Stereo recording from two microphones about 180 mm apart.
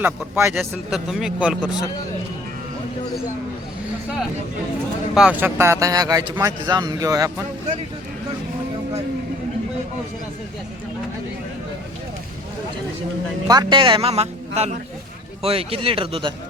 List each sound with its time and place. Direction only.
0.0 s speech: 15° right (ahead or behind)
0.6 s a man's voice: centre (ahead or behind)
5.1 s a man's voice: 5° right (ahead or behind)
13.5 s a man's voice: 25° right (ahead or behind)